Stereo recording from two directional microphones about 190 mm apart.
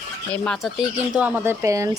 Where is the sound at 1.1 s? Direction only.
10° right (ahead or behind).